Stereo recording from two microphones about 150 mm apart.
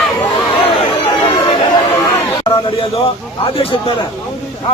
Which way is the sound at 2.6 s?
40° left (ahead or behind).